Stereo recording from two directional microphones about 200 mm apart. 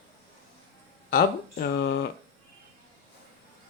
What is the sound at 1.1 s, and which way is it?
Speech, 50° left (ahead or behind).